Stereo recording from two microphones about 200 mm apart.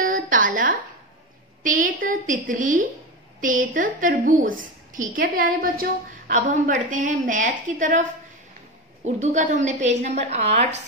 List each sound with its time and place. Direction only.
0.0 s a sound: 40° right (ahead or behind)
1.6 s a woman's voice: 40° right (ahead or behind)
9.0 s a woman's voice: 35° right (ahead or behind)